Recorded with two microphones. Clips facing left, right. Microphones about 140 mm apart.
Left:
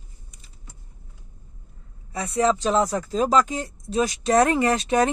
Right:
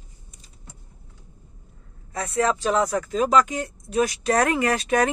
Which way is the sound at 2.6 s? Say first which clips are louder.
Even; 25° left (ahead or behind).